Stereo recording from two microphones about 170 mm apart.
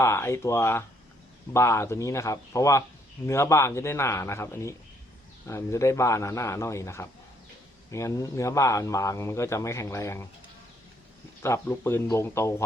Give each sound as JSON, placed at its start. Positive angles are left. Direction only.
{"t": 0.0, "sound": "a man's voice", "side_deg": 15}
{"t": 11.4, "sound": "a man's voice", "side_deg": 15}